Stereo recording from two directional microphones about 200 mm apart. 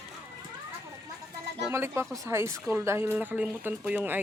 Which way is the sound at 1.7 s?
15° right (ahead or behind).